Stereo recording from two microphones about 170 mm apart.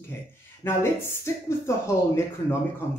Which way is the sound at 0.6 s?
15° left (ahead or behind).